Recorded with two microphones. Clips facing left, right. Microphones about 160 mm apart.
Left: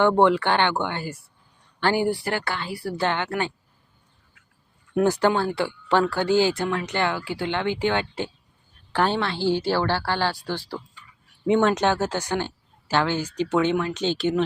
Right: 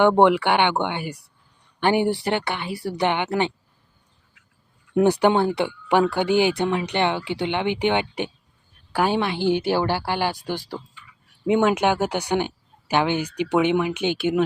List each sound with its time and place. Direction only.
0.0 s speech: 15° right (ahead or behind)
4.9 s speech: 15° right (ahead or behind)